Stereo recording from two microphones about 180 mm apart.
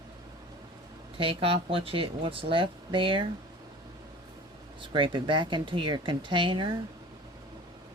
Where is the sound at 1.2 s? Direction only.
30° right (ahead or behind).